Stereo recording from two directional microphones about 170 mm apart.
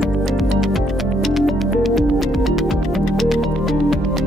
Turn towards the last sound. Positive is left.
turn(degrees=0)  # may be behind; listen again after turning